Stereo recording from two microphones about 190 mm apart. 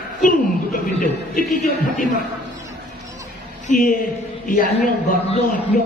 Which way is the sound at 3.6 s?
45° left (ahead or behind).